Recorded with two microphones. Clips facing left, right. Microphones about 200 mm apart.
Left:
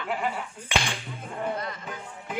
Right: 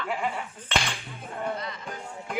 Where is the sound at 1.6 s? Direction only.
50° left (ahead or behind).